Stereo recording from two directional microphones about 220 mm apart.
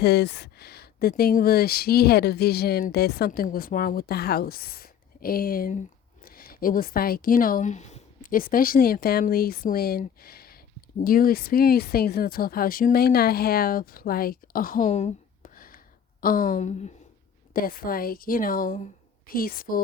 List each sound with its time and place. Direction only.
0.0 s speech: 45° left (ahead or behind)